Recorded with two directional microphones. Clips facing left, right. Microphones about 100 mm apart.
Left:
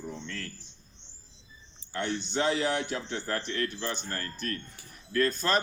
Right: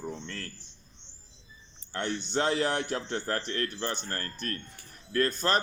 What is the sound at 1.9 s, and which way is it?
A man's voice, 50° right (ahead or behind).